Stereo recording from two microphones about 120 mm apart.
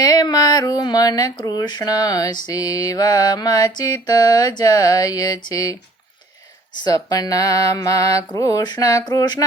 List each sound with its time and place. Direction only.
0.0 s speech: 30° left (ahead or behind)
6.8 s mantra: 30° left (ahead or behind)